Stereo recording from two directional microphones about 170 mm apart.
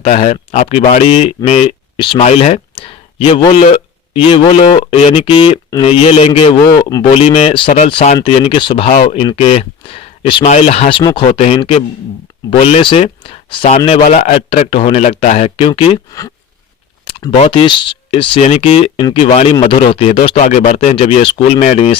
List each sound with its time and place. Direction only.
0.0 s a man's voice: 40° left (ahead or behind)
17.1 s speech: 30° left (ahead or behind)